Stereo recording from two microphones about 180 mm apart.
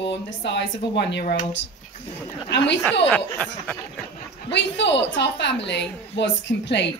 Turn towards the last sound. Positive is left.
turn(degrees=75)  # may be behind; listen again after turning